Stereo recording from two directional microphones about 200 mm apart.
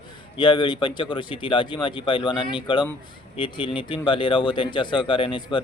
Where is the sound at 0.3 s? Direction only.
25° left (ahead or behind).